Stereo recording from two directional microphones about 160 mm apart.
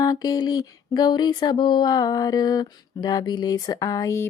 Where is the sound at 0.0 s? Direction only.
25° left (ahead or behind).